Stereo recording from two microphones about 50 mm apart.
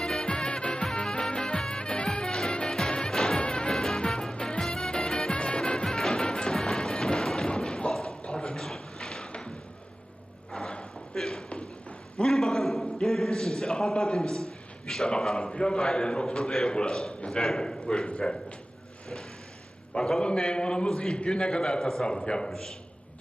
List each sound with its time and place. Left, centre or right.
0.0 s music: centre
3.4 s music: centre
8.2 s a sound: centre
10.5 s a sound: centre
14.8 s a man's voice: centre
17.4 s a man's voice: centre
17.8 s speech: centre
19.9 s a man's voice: centre